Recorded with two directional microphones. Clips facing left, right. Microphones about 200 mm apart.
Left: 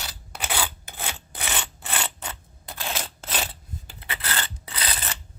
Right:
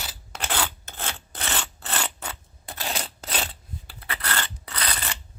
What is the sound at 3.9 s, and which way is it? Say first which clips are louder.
Filing: right 1 dB; 20° left (ahead or behind).